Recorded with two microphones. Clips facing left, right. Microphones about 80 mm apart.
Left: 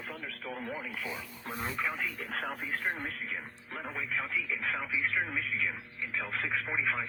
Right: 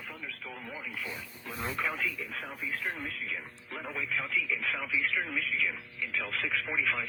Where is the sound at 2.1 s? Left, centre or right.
Left.